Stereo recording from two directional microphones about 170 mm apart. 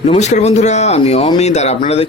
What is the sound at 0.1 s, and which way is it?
A man's voice, 40° left (ahead or behind).